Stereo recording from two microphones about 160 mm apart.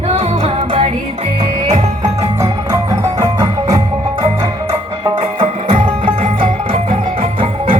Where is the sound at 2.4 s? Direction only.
20° right (ahead or behind).